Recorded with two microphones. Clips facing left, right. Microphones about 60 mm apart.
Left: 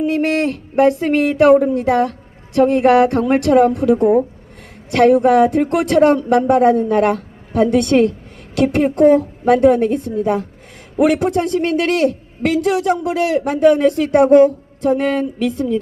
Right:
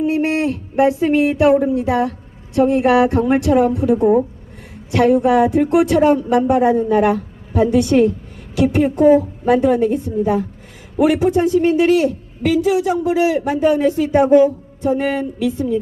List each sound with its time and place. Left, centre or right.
0.0 s a man's voice: left